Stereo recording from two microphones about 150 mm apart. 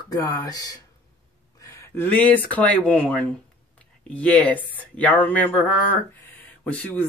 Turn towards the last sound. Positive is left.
turn(degrees=10)  # may be behind; listen again after turning